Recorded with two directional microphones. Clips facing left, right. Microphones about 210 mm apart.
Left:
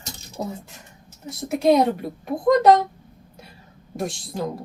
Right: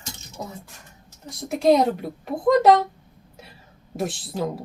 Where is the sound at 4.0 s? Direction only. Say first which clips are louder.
Right 1 dB; centre (ahead or behind).